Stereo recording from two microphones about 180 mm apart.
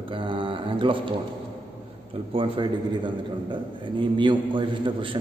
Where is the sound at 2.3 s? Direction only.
25° right (ahead or behind).